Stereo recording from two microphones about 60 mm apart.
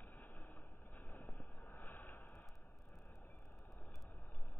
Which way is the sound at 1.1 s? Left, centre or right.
Left.